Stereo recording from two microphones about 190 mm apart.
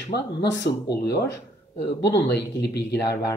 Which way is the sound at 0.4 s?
65° left (ahead or behind).